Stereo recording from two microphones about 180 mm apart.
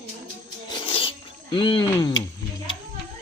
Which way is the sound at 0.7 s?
30° left (ahead or behind).